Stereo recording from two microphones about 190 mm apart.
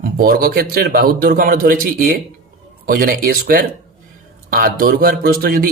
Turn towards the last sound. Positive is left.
turn(degrees=-50)  # may be behind; listen again after turning